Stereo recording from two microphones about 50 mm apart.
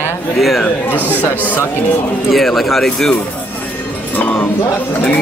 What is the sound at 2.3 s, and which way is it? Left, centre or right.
Speech, centre.